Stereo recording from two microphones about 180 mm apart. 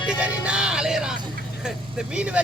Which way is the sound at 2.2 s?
5° right (ahead or behind).